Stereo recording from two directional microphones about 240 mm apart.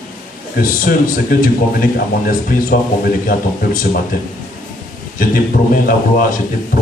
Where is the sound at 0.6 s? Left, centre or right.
Left.